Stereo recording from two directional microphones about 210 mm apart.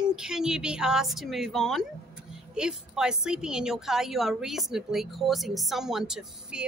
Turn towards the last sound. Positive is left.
turn(degrees=0)  # may be behind; listen again after turning